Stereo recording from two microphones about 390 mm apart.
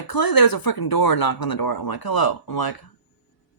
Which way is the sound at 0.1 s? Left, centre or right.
Left.